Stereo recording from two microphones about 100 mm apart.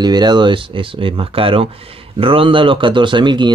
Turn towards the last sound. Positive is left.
turn(degrees=-50)  # may be behind; listen again after turning